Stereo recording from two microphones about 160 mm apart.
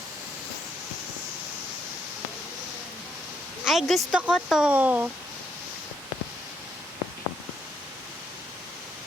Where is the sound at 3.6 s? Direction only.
Centre (ahead or behind).